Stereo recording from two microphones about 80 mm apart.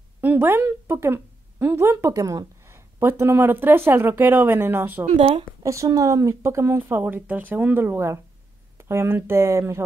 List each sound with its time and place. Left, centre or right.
0.2 s speech: right
2.1 s speech: right
5.6 s speech: right